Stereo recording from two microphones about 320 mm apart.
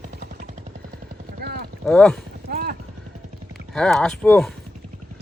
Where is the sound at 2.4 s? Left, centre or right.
Right.